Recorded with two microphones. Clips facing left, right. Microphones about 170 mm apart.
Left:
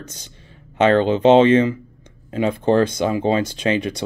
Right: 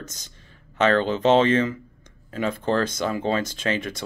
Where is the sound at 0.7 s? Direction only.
15° left (ahead or behind).